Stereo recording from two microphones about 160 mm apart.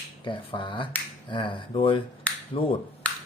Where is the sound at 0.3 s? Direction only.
30° left (ahead or behind).